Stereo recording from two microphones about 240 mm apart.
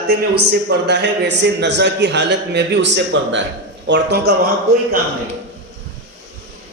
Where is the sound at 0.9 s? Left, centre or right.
Right.